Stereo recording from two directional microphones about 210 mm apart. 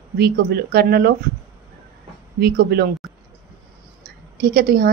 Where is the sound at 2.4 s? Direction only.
50° right (ahead or behind).